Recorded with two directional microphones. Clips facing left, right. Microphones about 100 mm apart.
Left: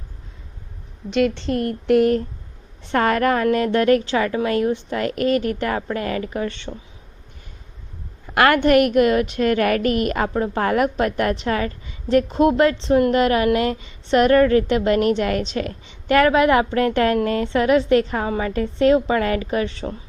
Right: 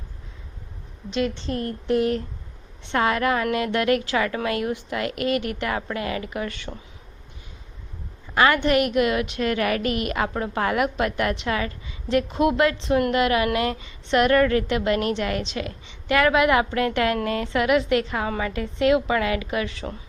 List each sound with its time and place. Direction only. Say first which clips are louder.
1.5 s a sound: left 6 dB; 60° left (ahead or behind)
2.8 s a woman's voice: left 4 dB; 45° left (ahead or behind)
8.4 s a woman's voice: left 4 dB; 50° left (ahead or behind); by 20.0 s 30° left (ahead or behind)